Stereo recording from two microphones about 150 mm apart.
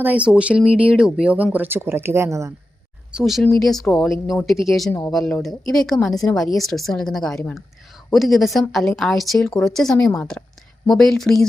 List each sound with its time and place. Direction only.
0.0 s speech: 10° right (ahead or behind)
3.1 s speech: 5° right (ahead or behind)
4.9 s speech: 15° left (ahead or behind)
5.1 s speech: centre (ahead or behind)